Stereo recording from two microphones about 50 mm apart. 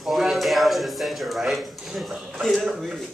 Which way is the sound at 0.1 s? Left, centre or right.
Centre.